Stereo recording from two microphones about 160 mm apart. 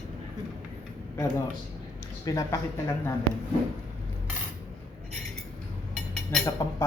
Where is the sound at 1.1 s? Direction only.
20° left (ahead or behind).